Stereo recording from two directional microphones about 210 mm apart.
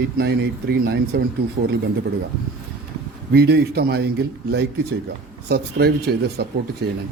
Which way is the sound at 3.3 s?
50° right (ahead or behind).